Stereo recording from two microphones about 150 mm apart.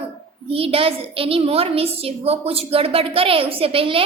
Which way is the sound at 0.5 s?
40° right (ahead or behind).